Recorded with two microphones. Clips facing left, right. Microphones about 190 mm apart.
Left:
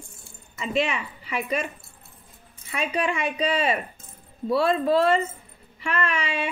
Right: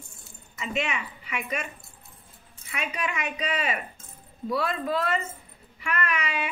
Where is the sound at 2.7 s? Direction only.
30° left (ahead or behind).